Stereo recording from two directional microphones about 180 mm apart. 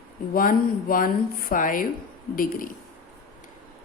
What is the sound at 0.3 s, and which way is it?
A woman's voice, 50° left (ahead or behind).